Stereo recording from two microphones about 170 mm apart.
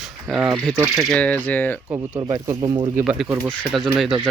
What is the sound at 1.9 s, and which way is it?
Speech, 25° right (ahead or behind).